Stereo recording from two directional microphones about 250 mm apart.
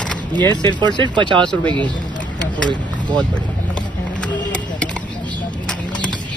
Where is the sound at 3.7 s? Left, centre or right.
Centre.